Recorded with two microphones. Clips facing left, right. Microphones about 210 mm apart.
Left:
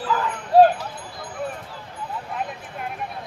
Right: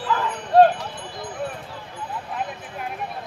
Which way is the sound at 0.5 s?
5° left (ahead or behind).